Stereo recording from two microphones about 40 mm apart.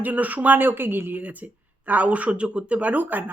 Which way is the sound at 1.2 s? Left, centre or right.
Right.